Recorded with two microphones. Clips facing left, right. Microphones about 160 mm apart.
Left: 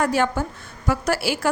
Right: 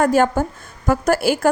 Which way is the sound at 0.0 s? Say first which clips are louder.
Right 5 dB; 45° right (ahead or behind).